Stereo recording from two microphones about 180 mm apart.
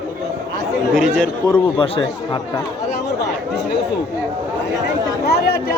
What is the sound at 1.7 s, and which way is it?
Speech, 30° left (ahead or behind).